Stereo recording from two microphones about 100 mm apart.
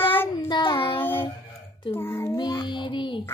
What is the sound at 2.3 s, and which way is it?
Child singing, 45° left (ahead or behind).